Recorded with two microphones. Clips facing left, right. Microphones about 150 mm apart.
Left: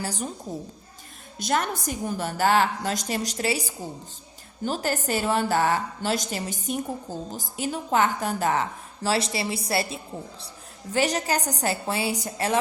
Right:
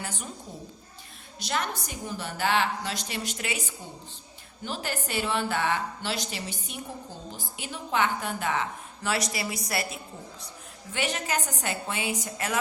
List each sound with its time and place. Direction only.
0.0 s a woman's voice: 35° left (ahead or behind)
1.4 s a woman's voice: 45° left (ahead or behind)
9.0 s a woman's voice: 30° left (ahead or behind)